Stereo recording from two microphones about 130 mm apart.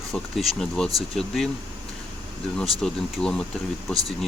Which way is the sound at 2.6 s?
5° left (ahead or behind).